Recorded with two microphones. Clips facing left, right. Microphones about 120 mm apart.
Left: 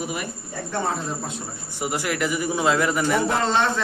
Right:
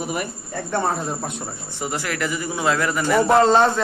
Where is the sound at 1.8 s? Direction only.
15° left (ahead or behind).